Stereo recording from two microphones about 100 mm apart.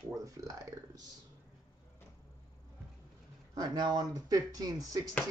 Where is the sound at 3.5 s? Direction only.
40° right (ahead or behind).